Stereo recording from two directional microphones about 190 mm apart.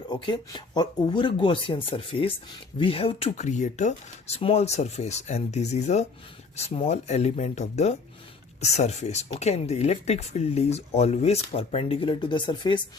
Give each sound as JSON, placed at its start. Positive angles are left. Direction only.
{"t": 0.1, "sound": "speech", "side_deg": 25}